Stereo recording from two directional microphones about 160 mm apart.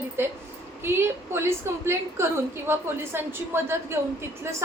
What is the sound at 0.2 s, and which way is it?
A woman's voice, 15° right (ahead or behind).